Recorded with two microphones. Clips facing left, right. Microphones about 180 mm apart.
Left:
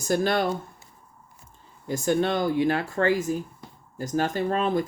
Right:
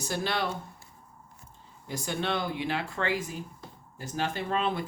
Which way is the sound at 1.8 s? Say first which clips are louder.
Left 8 dB; 45° left (ahead or behind).